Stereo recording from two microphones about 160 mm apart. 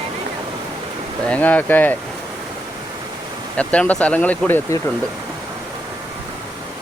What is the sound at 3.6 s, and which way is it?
Speech, 10° left (ahead or behind).